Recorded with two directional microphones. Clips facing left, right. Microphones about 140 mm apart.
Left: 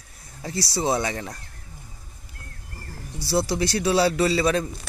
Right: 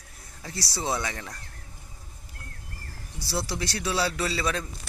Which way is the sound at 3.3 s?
20° left (ahead or behind).